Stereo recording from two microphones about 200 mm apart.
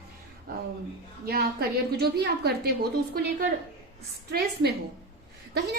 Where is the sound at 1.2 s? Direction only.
50° right (ahead or behind).